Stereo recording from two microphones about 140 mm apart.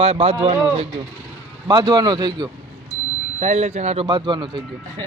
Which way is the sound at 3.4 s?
50° right (ahead or behind).